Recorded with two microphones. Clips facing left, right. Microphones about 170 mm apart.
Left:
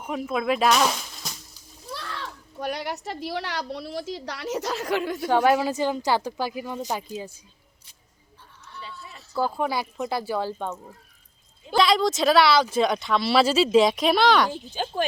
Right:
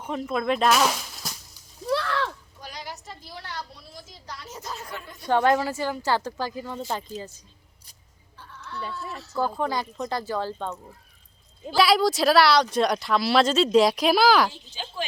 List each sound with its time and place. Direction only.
0.0 s speech: 5° left (ahead or behind)
1.9 s a sound: 75° right (ahead or behind)
2.6 s a woman's voice: 65° left (ahead or behind); by 5.2 s 90° left
5.2 s a woman's voice: 10° left (ahead or behind)
8.4 s a sound: 80° right
9.3 s a woman's voice: 10° left (ahead or behind)
11.8 s speech: 5° right (ahead or behind)
14.5 s speech: 50° left (ahead or behind)